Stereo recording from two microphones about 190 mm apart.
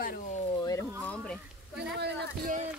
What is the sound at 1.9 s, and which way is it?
Speech, 65° right (ahead or behind).